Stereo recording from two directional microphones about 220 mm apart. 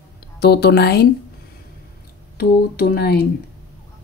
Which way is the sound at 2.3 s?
45° left (ahead or behind).